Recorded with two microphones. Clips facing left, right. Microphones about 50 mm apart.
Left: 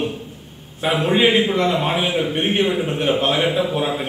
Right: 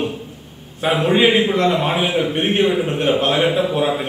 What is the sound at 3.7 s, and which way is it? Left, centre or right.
Speech, centre.